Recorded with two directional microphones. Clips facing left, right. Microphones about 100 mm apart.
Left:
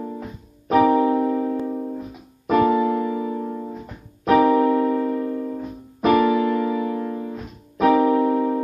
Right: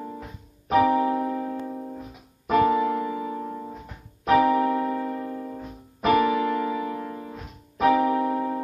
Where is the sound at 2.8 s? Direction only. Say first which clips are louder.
Left 4 dB; centre (ahead or behind).